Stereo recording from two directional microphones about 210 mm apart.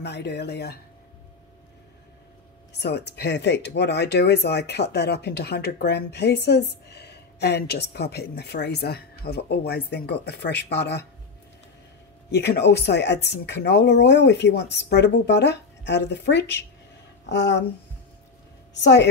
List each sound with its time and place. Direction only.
0.0 s a woman's voice: 55° left (ahead or behind)
2.8 s a woman's voice: 55° left (ahead or behind)
12.3 s speech: 55° left (ahead or behind)
18.7 s a woman's voice: 55° left (ahead or behind)